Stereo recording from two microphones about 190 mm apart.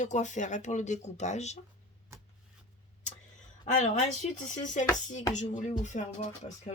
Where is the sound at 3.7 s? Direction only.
40° left (ahead or behind).